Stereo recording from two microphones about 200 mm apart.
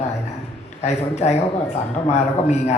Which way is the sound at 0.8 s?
35° left (ahead or behind).